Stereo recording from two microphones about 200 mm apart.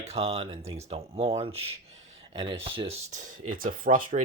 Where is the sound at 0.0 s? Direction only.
30° right (ahead or behind).